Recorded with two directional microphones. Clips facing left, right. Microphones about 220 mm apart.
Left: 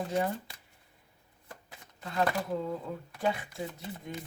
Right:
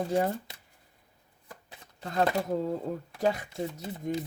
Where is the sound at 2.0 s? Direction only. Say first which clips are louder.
Right 3 dB; 40° right (ahead or behind).